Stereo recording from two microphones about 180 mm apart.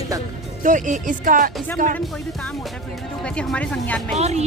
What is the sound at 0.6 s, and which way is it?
Speech, 45° right (ahead or behind).